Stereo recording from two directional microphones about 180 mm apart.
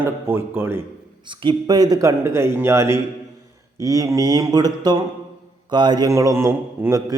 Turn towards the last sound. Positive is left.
turn(degrees=-15)  # may be behind; listen again after turning